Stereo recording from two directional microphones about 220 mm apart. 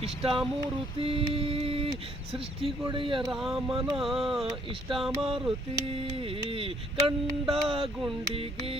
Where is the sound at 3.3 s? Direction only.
Centre (ahead or behind).